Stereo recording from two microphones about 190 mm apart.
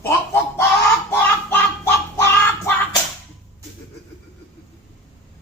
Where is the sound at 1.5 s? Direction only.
15° left (ahead or behind).